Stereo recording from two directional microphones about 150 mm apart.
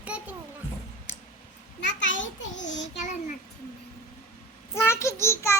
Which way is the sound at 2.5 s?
55° left (ahead or behind).